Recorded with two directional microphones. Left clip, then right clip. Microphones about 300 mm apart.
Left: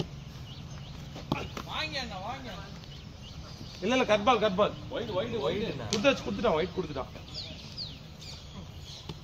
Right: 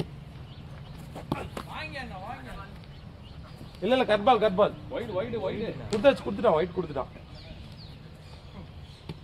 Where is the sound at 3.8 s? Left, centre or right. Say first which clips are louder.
Right 2 dB; right.